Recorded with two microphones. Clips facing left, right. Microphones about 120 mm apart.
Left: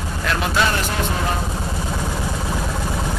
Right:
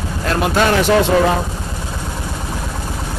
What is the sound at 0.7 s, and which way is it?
Speech, 90° right.